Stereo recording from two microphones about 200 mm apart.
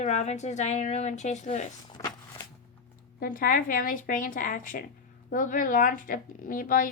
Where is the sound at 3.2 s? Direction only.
45° left (ahead or behind).